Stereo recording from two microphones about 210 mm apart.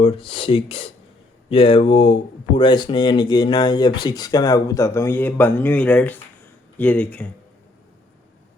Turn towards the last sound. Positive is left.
turn(degrees=5)  # may be behind; listen again after turning